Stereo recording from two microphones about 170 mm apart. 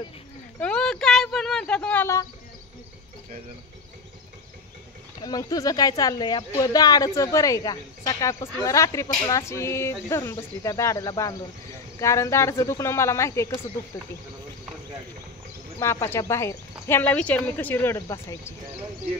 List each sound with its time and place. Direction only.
0.6 s a sound: 5° left (ahead or behind)
5.2 s speech: 20° left (ahead or behind)
15.8 s speech: 15° left (ahead or behind)